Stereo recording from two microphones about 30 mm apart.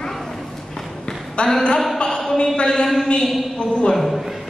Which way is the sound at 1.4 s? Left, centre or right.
Left.